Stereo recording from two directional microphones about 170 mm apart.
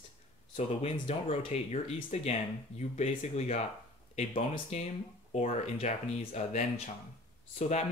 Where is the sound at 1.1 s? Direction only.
40° left (ahead or behind).